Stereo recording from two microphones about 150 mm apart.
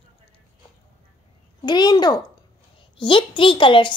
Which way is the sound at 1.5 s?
30° left (ahead or behind).